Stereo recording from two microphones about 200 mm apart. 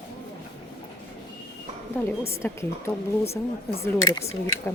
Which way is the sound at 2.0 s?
15° left (ahead or behind).